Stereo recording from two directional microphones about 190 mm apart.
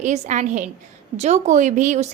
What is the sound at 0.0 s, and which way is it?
Speech, 40° right (ahead or behind).